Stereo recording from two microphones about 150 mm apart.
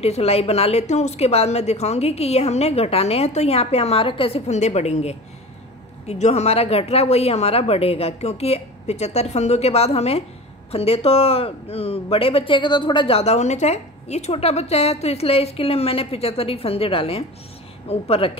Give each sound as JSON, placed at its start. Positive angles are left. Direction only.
{"t": 0.0, "sound": "a woman's voice", "side_deg": 45}